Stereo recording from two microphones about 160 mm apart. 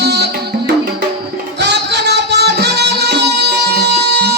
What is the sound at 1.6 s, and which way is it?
Music, 90° right.